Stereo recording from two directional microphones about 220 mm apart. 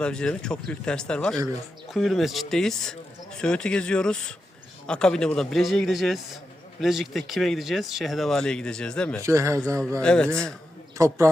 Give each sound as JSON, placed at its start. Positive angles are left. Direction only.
{"t": 0.0, "sound": "speech", "side_deg": 5}
{"t": 9.2, "sound": "a man's voice", "side_deg": -15}
{"t": 10.0, "sound": "speech", "side_deg": 5}
{"t": 10.9, "sound": "a man's voice", "side_deg": -15}